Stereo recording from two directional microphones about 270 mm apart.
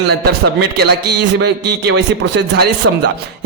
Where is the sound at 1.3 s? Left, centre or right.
Right.